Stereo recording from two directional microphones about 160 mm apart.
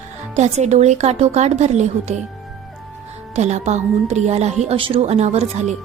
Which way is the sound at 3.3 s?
45° right (ahead or behind).